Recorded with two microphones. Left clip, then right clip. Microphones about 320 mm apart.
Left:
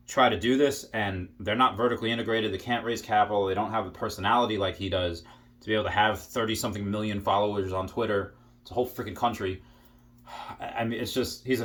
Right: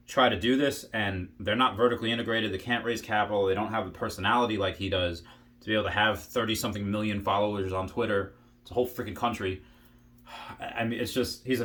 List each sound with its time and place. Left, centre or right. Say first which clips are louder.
0.1 s speech: left 1 dB; centre